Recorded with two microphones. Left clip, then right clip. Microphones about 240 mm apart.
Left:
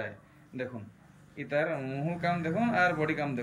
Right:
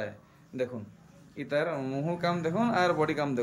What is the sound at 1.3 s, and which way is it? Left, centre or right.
A man's voice, centre.